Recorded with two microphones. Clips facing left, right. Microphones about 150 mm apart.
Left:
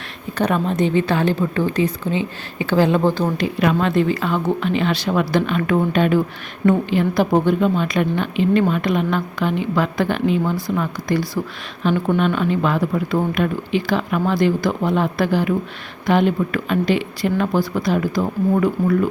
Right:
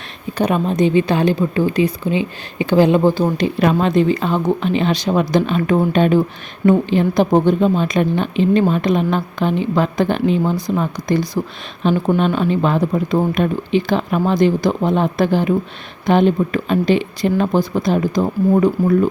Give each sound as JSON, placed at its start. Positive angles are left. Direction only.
{"t": 0.3, "sound": "a woman's voice", "side_deg": -15}
{"t": 3.3, "sound": "a woman's voice", "side_deg": -30}